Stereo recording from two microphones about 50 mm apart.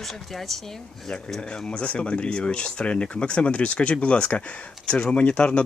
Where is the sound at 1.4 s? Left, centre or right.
Centre.